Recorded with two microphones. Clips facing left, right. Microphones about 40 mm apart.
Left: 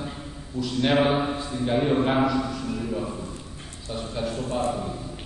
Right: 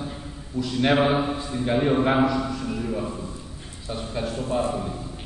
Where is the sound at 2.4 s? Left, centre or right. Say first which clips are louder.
Right 1 dB; centre.